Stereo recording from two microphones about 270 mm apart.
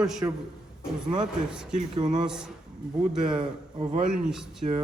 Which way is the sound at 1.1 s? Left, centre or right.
Centre.